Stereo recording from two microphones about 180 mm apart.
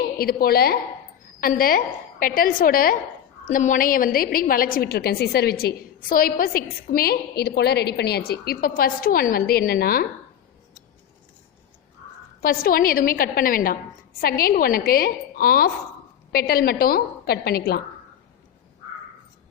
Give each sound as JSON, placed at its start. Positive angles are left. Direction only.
{"t": 0.2, "sound": "a woman's voice", "side_deg": 55}
{"t": 12.4, "sound": "a woman's voice", "side_deg": 55}